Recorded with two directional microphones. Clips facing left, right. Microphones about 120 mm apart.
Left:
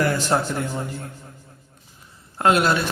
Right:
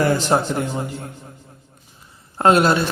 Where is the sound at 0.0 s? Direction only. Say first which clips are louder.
Right 3 dB; 25° right (ahead or behind).